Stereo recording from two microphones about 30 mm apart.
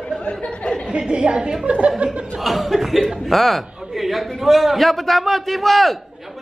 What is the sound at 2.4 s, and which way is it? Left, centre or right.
A man's voice, centre.